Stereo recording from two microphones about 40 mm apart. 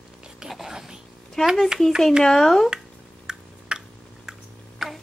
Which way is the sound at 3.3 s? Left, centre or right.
Centre.